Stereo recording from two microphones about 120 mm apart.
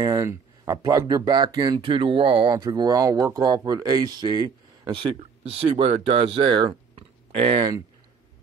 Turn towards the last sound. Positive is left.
turn(degrees=-55)  # may be behind; listen again after turning